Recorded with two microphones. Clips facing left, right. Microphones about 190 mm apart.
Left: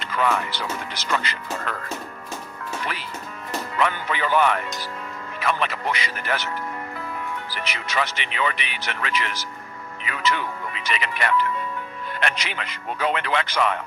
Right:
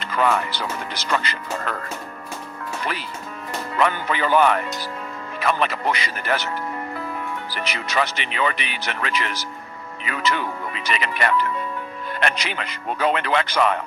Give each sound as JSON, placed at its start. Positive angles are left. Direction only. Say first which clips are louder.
{"t": 0.0, "sound": "speech", "louder": "right 2 dB", "side_deg": -40}
{"t": 3.8, "sound": "speech", "louder": "right 3 dB", "side_deg": -40}
{"t": 7.5, "sound": "speech", "louder": "right 4 dB", "side_deg": -40}